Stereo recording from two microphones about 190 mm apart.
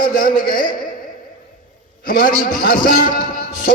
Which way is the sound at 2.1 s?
45° left (ahead or behind).